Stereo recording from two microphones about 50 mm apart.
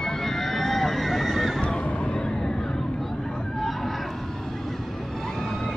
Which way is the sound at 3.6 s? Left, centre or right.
Centre.